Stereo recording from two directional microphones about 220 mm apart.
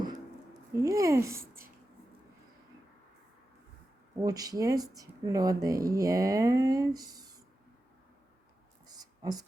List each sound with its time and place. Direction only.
0.8 s speech: 15° right (ahead or behind)
4.2 s speech: 15° right (ahead or behind)
8.9 s a sound: 15° right (ahead or behind)